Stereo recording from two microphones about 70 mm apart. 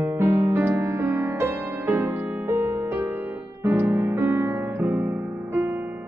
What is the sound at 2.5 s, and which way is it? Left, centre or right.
Music, right.